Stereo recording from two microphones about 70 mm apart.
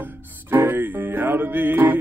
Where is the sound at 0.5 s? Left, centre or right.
Right.